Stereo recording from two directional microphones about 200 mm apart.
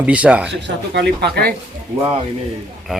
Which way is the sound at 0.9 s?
55° right (ahead or behind).